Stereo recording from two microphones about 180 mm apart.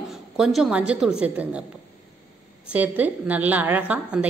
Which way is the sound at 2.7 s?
10° right (ahead or behind).